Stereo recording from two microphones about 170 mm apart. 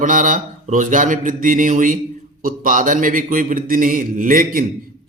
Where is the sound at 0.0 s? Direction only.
50° right (ahead or behind).